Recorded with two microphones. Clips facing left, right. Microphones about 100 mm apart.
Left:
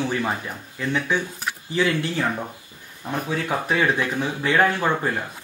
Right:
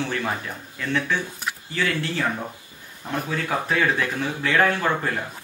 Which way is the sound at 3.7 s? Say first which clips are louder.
Left 2 dB; 15° left (ahead or behind).